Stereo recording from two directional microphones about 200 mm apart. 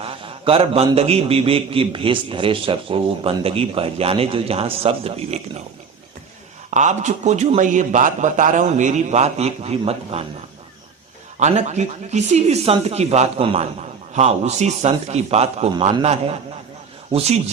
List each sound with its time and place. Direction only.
0.0 s a man's voice: 25° right (ahead or behind)
6.7 s a man's voice: 35° right (ahead or behind)
11.3 s a man's voice: 35° right (ahead or behind)